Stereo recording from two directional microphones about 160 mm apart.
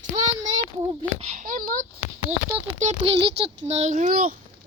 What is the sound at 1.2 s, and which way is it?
Speech, 50° right (ahead or behind).